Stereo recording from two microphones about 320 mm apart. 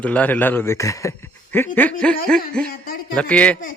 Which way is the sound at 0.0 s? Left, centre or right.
Centre.